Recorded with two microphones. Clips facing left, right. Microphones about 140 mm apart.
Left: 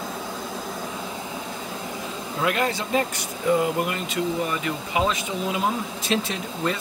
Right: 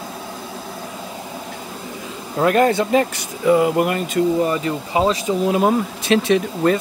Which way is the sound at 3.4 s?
75° right (ahead or behind).